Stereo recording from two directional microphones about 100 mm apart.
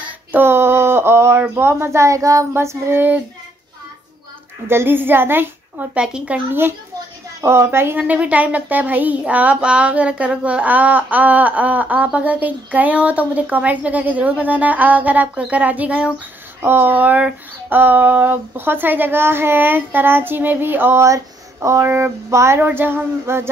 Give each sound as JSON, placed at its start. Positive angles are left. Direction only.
{"t": 0.3, "sound": "a sound", "side_deg": -25}
{"t": 1.5, "sound": "female singing", "side_deg": -25}
{"t": 4.6, "sound": "female singing", "side_deg": -20}
{"t": 5.9, "sound": "speech", "side_deg": -10}
{"t": 7.4, "sound": "female singing", "side_deg": -25}
{"t": 8.0, "sound": "speech", "side_deg": -15}
{"t": 16.6, "sound": "female singing", "side_deg": -20}